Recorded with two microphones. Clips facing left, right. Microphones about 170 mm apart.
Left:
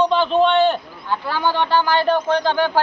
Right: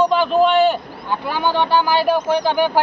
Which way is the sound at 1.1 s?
15° right (ahead or behind).